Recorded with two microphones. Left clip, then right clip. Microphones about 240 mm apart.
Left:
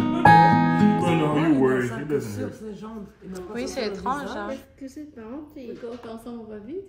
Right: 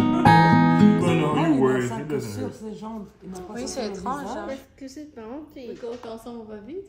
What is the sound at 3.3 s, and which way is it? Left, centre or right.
A woman's voice, centre.